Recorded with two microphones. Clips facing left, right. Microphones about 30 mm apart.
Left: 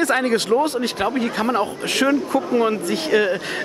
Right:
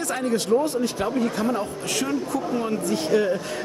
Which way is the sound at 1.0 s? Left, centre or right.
Left.